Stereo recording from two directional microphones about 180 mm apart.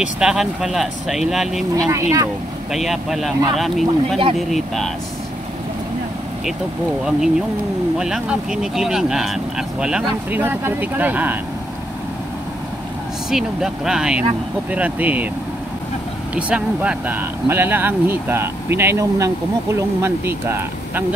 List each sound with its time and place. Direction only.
0.0 s speech: 5° right (ahead or behind)
1.9 s speech: 15° right (ahead or behind)
2.7 s speech: centre (ahead or behind)
8.0 s speech: 5° right (ahead or behind)
13.3 s speech: 5° right (ahead or behind)
16.3 s speech: 5° right (ahead or behind)